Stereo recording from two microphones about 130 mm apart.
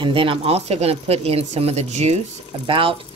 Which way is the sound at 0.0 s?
40° right (ahead or behind).